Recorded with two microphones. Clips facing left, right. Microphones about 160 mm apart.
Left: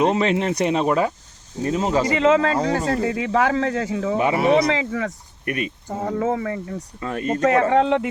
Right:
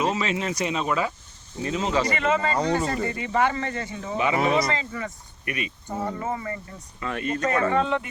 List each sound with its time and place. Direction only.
0.0 s speech: 60° left (ahead or behind); by 2.0 s 45° left (ahead or behind)
2.0 s speech: 90° left
2.6 s speech: 5° left (ahead or behind)
3.1 s speech: 90° left
4.4 s speech: 75° left (ahead or behind)
5.5 s speech: 50° left (ahead or behind)
6.1 s speech: 90° left
6.7 s speech: 40° left (ahead or behind)
7.4 s speech: 90° left